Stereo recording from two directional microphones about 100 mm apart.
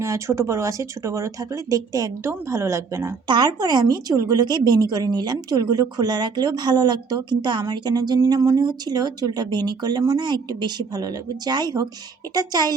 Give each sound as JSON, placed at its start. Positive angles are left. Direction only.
{"t": 0.0, "sound": "speech", "side_deg": -30}
{"t": 3.2, "sound": "a woman's voice", "side_deg": -45}